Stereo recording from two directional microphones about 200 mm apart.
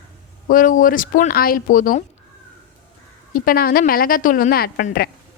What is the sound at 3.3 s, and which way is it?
A woman's voice, 45° left (ahead or behind).